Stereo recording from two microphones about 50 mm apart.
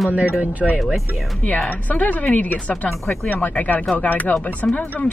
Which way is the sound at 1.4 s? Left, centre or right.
Left.